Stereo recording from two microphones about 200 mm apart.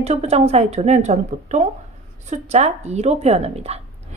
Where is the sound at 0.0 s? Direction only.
30° right (ahead or behind).